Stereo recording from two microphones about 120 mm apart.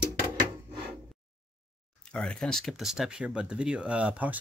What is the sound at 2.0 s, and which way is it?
Speech, 5° left (ahead or behind).